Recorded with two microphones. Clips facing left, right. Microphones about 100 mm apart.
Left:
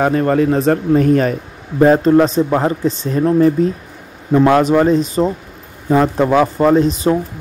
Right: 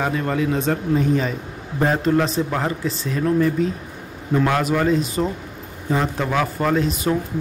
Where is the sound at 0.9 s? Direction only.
60° left (ahead or behind).